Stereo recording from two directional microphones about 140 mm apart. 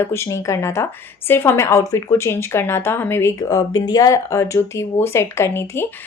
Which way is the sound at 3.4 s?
25° left (ahead or behind).